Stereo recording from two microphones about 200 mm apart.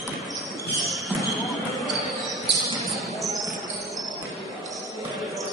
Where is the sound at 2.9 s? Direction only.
Centre (ahead or behind).